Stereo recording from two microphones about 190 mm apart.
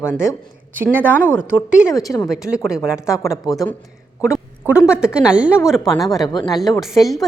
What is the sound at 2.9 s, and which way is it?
Speech, 15° left (ahead or behind).